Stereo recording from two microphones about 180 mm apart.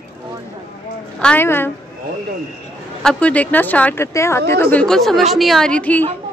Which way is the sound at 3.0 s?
5° left (ahead or behind).